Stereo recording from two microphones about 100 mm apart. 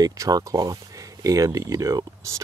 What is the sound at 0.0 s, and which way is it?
Speech, 35° right (ahead or behind).